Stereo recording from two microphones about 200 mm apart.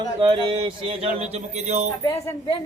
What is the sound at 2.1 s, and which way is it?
Speech, 15° left (ahead or behind).